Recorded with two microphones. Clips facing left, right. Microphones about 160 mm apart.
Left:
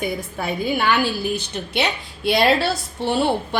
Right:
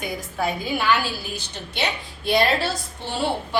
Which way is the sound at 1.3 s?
70° left (ahead or behind).